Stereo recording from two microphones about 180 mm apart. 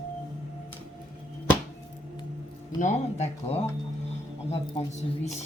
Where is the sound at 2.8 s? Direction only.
40° left (ahead or behind).